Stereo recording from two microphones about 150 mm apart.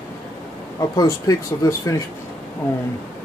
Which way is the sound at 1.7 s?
20° left (ahead or behind).